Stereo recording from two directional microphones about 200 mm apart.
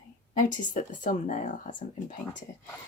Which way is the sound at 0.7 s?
40° left (ahead or behind).